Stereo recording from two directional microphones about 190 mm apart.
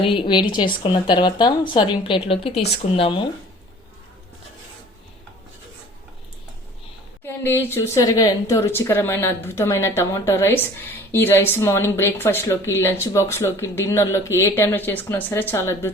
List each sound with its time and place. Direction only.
0.0 s a woman's voice: 25° left (ahead or behind)
7.3 s a woman's voice: 10° left (ahead or behind)